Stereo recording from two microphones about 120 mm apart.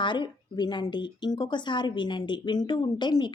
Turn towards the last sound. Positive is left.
turn(degrees=40)  # may be behind; listen again after turning